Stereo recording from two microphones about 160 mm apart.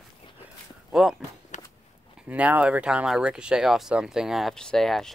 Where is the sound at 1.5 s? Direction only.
45° left (ahead or behind).